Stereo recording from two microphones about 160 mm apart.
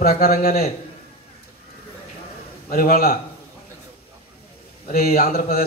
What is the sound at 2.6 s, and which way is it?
Speech, 65° left (ahead or behind).